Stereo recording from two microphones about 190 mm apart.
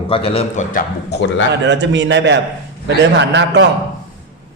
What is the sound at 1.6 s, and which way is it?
A man's voice, 70° right (ahead or behind).